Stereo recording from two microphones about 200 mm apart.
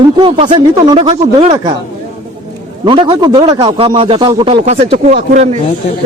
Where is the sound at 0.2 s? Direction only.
25° right (ahead or behind).